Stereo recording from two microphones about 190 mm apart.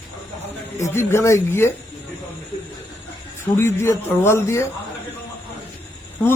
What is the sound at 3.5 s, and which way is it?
Speech, 15° left (ahead or behind).